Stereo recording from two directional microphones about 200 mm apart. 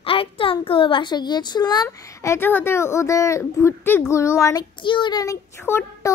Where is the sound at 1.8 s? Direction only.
15° left (ahead or behind).